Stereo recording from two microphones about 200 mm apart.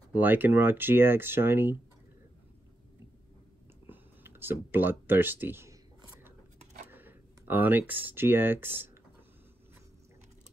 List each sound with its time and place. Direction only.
0.1 s speech: 10° right (ahead or behind)
3.9 s speech: 10° right (ahead or behind)
6.6 s a sound: 35° right (ahead or behind)
6.9 s speech: 10° right (ahead or behind)